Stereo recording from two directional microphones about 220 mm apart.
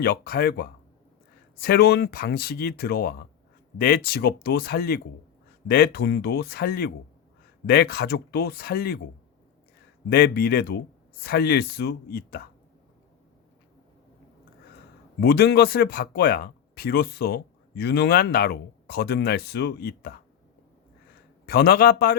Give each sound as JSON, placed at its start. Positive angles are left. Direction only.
{"t": 0.0, "sound": "speech", "side_deg": 45}
{"t": 10.1, "sound": "speech", "side_deg": 45}
{"t": 15.2, "sound": "speech", "side_deg": 45}
{"t": 21.4, "sound": "speech", "side_deg": 45}